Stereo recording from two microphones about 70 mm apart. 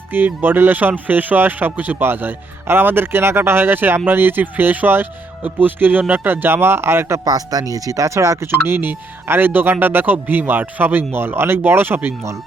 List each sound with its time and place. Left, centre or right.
0.1 s speech: right
7.3 s speech: right
8.4 s speech: right